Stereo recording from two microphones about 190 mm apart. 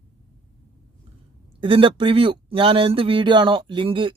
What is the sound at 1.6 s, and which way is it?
A man's voice, 25° right (ahead or behind).